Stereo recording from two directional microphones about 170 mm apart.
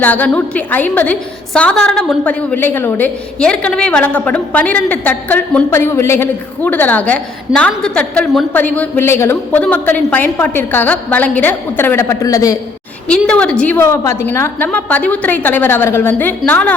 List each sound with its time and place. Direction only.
0.0 s a woman's voice: 10° left (ahead or behind)
13.1 s a woman's voice: 5° left (ahead or behind)